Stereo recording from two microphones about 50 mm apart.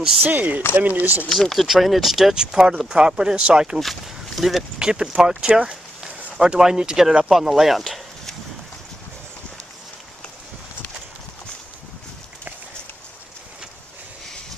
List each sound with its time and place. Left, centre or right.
0.2 s speech: right
1.3 s speech: centre
3.8 s speech: centre
4.7 s speech: centre
5.5 s a sound: right
6.3 s speech: centre